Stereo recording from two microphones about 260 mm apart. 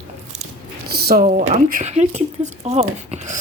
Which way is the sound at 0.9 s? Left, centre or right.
Right.